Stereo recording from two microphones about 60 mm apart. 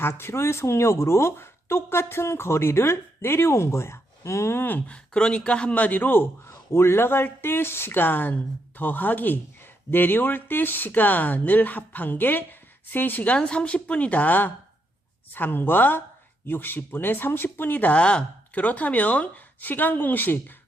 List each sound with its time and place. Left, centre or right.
0.0 s speech: left
4.9 s speech: centre; by 6.2 s left
6.7 s speech: left
13.3 s speech: centre; by 20.4 s left